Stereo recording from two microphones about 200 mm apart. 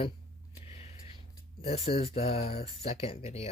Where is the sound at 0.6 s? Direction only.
30° left (ahead or behind).